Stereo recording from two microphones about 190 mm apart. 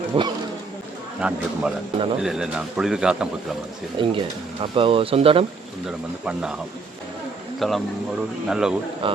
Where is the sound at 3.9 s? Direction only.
25° right (ahead or behind).